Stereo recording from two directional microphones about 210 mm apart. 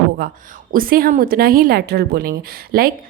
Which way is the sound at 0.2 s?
40° right (ahead or behind).